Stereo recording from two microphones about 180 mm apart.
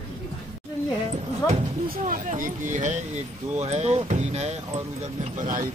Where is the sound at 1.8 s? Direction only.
50° right (ahead or behind).